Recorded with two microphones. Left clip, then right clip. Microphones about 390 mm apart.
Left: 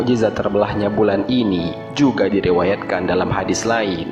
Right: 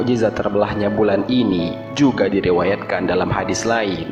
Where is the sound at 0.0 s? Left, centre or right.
Left.